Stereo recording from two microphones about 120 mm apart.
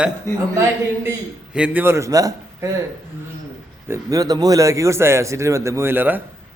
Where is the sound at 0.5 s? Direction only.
20° right (ahead or behind).